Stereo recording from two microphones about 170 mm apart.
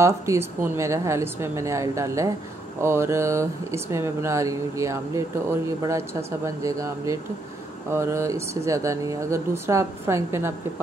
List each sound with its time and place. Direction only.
0.0 s speech: 15° right (ahead or behind)